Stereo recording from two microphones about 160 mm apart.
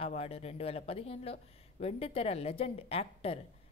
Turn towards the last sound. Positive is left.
turn(degrees=40)  # may be behind; listen again after turning